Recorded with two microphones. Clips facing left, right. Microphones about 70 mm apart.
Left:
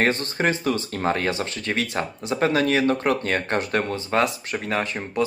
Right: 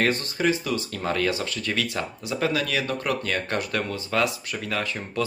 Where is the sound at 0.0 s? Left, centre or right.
Left.